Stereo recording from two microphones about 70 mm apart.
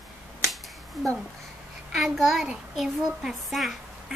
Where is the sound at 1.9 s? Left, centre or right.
Centre.